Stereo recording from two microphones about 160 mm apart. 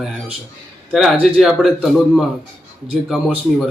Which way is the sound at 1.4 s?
Centre (ahead or behind).